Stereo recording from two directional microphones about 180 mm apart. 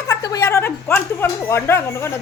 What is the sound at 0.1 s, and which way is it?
A woman's voice, 20° left (ahead or behind).